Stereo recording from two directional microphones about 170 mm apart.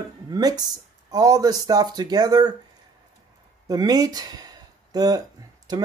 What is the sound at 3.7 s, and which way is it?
Speech, 20° right (ahead or behind).